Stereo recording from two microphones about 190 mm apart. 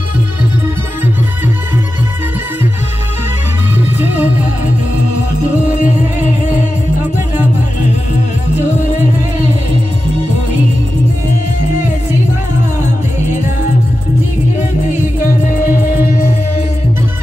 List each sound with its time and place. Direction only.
4.0 s music: 10° right (ahead or behind)
15.4 s music: 45° left (ahead or behind)